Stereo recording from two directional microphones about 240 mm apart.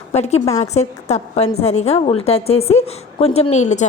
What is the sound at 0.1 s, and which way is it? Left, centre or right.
A woman's voice, left.